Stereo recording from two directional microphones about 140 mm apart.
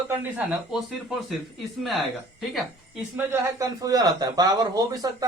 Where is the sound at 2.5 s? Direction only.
5° right (ahead or behind).